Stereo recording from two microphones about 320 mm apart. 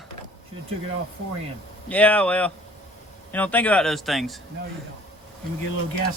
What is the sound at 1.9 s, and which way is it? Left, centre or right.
Speech, centre.